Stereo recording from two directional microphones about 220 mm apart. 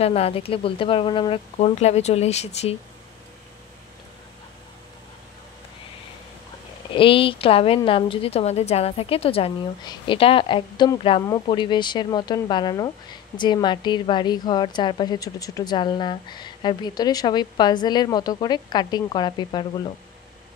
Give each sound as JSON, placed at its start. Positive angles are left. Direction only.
{"t": 0.0, "sound": "a woman's voice", "side_deg": 25}
{"t": 6.9, "sound": "a woman's voice", "side_deg": 25}